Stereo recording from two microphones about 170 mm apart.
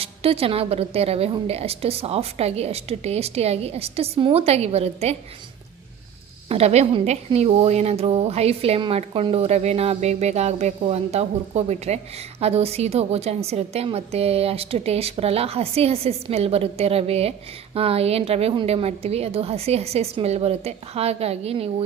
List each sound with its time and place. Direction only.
0.0 s a woman's voice: 35° right (ahead or behind)
6.5 s a woman's voice: 40° right (ahead or behind)